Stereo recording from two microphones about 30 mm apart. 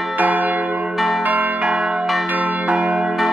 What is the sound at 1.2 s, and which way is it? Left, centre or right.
Change ringing, right.